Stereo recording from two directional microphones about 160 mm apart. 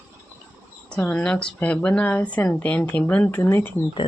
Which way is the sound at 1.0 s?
5° left (ahead or behind).